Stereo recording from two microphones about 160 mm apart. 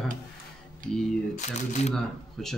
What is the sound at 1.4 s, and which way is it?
Speech, 45° left (ahead or behind).